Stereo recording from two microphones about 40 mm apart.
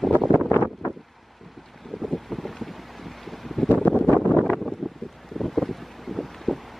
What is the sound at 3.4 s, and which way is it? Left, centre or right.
Wind noise, centre.